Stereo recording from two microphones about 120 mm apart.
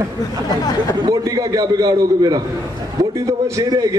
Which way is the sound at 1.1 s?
30° right (ahead or behind).